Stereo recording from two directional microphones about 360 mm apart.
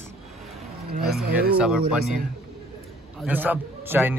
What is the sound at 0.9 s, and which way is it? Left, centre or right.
Speech, right.